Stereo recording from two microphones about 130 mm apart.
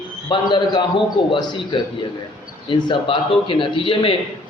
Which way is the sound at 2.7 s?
35° left (ahead or behind).